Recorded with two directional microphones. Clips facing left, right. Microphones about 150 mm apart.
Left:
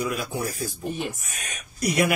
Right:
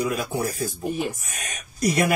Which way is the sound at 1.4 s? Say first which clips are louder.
Right 4 dB; 40° right (ahead or behind).